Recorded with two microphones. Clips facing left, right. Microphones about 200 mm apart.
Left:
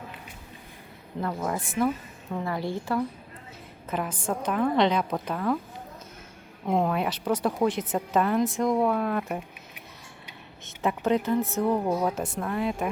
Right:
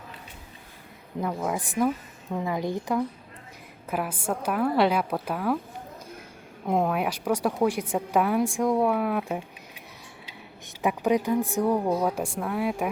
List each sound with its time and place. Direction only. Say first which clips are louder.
1.2 s speech: right 1 dB; 10° right (ahead or behind)
6.7 s speech: even; 5° right (ahead or behind)
10.8 s speech: right 1 dB; 15° right (ahead or behind)